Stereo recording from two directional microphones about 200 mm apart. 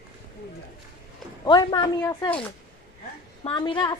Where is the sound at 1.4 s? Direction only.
20° left (ahead or behind).